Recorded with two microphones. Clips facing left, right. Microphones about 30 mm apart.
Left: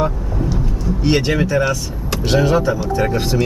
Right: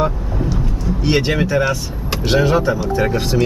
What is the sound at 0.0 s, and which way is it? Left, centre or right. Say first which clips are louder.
Vehicle: right 1 dB; centre.